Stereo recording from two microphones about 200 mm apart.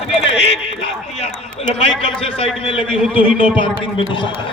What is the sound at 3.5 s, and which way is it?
Speech, 25° left (ahead or behind).